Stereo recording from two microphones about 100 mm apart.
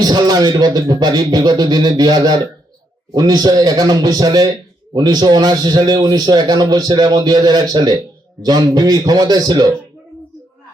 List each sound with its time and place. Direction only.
0.0 s a man's voice: 40° right (ahead or behind)